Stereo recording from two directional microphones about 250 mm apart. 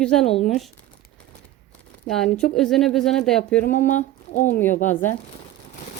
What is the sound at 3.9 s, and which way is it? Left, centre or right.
Speech, left.